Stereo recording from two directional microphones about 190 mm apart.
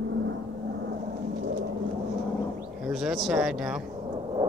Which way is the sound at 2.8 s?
Centre (ahead or behind).